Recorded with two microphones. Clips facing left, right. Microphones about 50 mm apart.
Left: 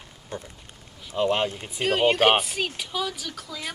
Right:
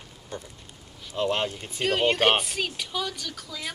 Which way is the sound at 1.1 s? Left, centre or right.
Centre.